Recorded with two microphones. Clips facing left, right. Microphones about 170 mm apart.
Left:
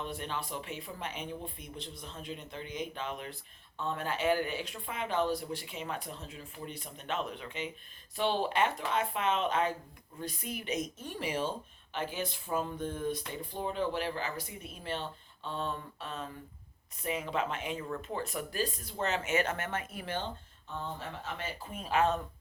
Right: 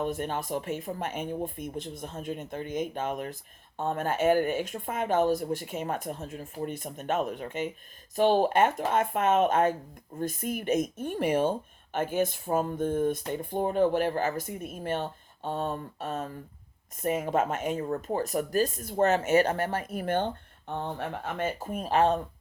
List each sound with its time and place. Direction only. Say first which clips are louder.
0.0 s speech: right 8 dB; 50° right (ahead or behind)